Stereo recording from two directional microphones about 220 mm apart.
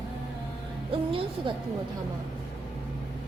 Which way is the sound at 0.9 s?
25° right (ahead or behind).